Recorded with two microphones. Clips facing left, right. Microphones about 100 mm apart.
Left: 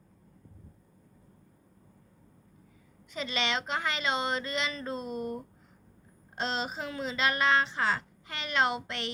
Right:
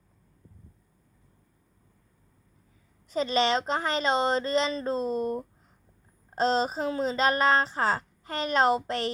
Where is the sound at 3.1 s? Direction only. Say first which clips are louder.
Right 8 dB; 35° right (ahead or behind).